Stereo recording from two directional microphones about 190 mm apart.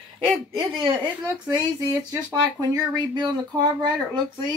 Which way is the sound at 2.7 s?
20° right (ahead or behind).